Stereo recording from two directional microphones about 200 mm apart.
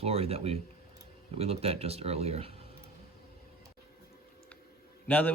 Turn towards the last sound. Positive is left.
turn(degrees=10)  # may be behind; listen again after turning